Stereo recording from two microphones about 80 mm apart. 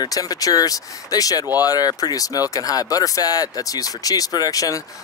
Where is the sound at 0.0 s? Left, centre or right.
Left.